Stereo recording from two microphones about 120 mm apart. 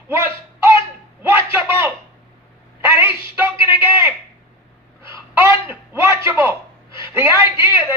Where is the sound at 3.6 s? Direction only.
20° right (ahead or behind).